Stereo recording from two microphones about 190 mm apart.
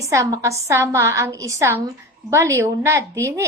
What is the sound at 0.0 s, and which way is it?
A child's voice, 15° right (ahead or behind).